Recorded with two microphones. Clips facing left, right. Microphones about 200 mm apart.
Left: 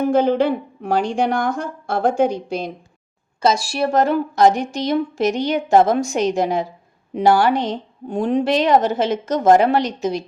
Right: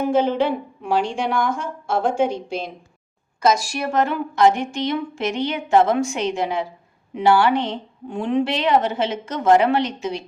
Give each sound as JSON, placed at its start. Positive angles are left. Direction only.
{"t": 0.0, "sound": "a woman's voice", "side_deg": 40}